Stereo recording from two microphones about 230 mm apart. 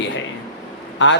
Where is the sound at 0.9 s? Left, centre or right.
Left.